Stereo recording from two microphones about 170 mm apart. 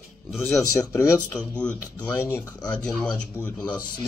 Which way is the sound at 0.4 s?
15° left (ahead or behind).